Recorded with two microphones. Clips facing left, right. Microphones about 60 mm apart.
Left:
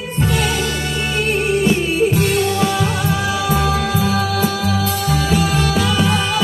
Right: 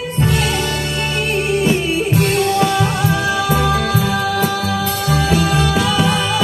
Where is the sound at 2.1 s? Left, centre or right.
Centre.